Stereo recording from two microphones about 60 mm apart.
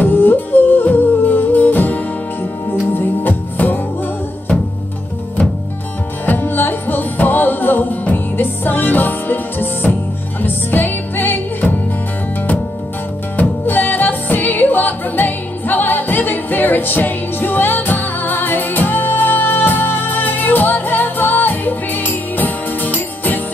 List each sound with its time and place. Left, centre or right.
0.0 s music: left
6.2 s music: left
13.4 s music: left